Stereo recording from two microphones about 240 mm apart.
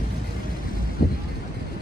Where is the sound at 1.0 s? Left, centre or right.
Left.